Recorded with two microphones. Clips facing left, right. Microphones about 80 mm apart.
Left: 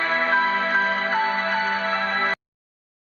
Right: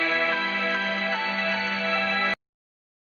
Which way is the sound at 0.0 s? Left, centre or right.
Left.